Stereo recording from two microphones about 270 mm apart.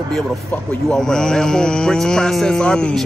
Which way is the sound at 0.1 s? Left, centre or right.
Centre.